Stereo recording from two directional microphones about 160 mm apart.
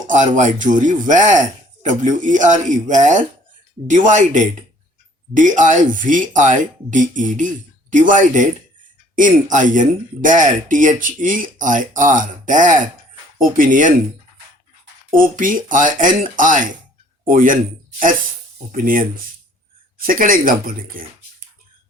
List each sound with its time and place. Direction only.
0.1 s speech: 50° right (ahead or behind)
15.1 s speech: 55° right (ahead or behind)
18.7 s speech: 60° right (ahead or behind)